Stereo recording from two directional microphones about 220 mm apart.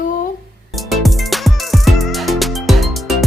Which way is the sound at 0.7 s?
Centre (ahead or behind).